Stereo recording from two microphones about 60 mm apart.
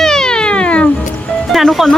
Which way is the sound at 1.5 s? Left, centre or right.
Centre.